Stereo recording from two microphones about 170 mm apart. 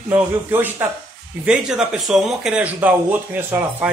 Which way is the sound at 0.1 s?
10° right (ahead or behind).